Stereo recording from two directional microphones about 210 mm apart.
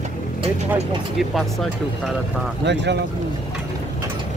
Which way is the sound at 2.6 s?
55° right (ahead or behind).